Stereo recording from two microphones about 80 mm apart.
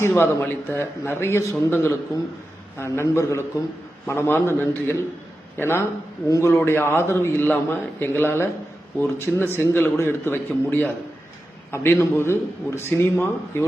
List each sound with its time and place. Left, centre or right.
0.0 s a man's voice: left